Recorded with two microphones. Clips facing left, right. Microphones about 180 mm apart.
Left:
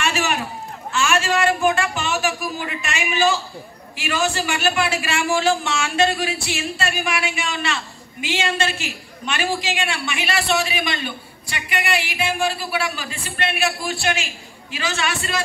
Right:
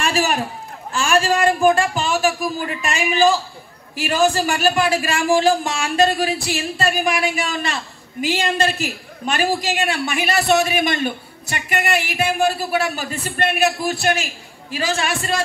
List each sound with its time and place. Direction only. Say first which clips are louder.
0.0 s a man's voice: right 3 dB; 35° right (ahead or behind)